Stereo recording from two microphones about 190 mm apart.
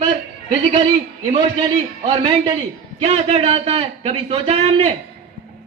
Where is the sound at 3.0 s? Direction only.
35° right (ahead or behind).